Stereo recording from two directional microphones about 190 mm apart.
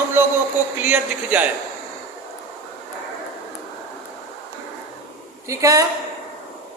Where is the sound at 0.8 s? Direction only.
10° right (ahead or behind).